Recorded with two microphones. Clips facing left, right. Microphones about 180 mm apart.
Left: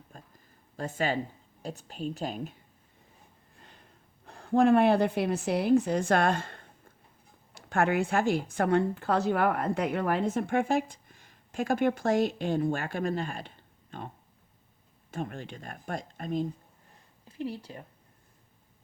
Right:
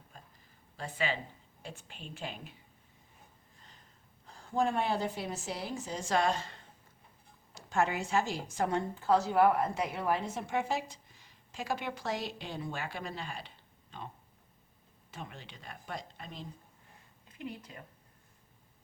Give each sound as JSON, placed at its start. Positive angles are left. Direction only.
{"t": 0.1, "sound": "a sound", "side_deg": 45}
{"t": 1.6, "sound": "a woman's voice", "side_deg": 40}
{"t": 4.3, "sound": "a woman's voice", "side_deg": 60}
{"t": 13.9, "sound": "a sound", "side_deg": 50}
{"t": 15.1, "sound": "a woman's voice", "side_deg": 50}
{"t": 17.2, "sound": "speech", "side_deg": 30}